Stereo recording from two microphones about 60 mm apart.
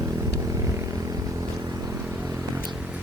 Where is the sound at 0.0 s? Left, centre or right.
Right.